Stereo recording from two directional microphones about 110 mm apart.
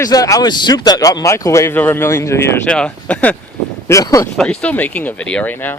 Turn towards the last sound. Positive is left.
turn(degrees=15)  # may be behind; listen again after turning